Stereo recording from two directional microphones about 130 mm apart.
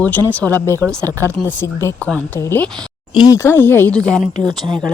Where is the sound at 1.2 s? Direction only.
20° left (ahead or behind).